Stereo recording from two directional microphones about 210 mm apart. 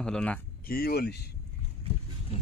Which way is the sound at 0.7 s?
45° left (ahead or behind).